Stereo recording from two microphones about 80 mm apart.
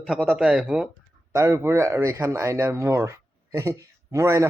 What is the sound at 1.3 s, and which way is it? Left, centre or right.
Speech, right.